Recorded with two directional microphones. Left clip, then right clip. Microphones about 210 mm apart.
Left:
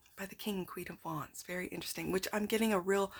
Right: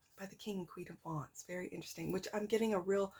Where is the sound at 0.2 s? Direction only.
30° left (ahead or behind).